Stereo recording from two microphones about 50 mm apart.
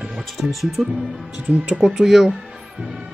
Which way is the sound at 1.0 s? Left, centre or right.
Right.